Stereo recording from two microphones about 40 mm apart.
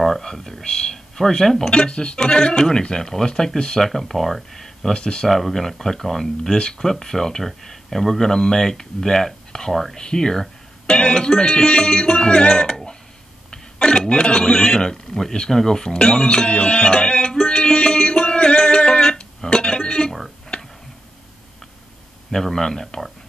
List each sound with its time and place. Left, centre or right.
0.0 s speech: centre
0.7 s speech: centre
1.7 s speech: left
2.1 s speech: centre
4.9 s speech: centre
5.3 s speech: centre; by 17.4 s left
17.5 s music: left
20.5 s tick-tock: left
22.3 s speech: centre